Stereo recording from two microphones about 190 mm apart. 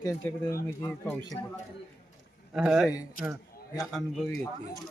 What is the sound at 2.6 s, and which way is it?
Speech, 5° right (ahead or behind).